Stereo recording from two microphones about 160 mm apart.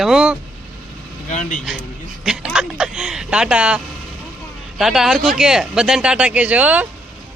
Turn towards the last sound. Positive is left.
turn(degrees=-10)  # may be behind; listen again after turning